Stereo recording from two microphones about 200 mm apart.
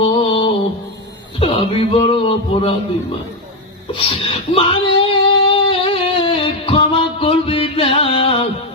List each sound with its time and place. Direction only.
0.0 s music: 25° left (ahead or behind)
1.4 s a sound: 25° left (ahead or behind)
3.9 s speech: 25° left (ahead or behind)
5.5 s music: 25° left (ahead or behind)